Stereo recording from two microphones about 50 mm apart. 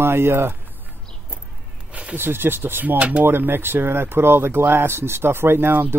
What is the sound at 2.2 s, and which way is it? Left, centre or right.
Speech, right.